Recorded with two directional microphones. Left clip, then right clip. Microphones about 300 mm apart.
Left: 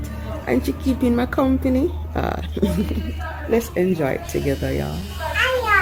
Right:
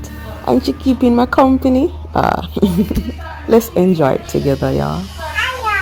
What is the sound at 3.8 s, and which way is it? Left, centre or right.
Speech, centre.